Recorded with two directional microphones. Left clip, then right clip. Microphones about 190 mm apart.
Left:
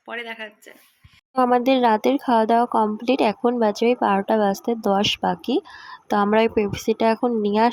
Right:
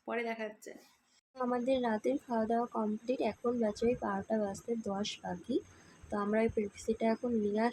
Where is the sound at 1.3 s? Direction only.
45° left (ahead or behind).